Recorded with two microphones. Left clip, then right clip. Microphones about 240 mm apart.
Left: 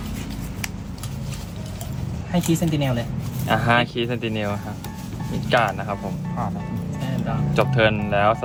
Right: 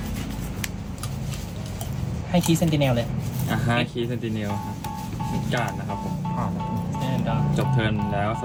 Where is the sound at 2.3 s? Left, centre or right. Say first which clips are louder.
Even; centre.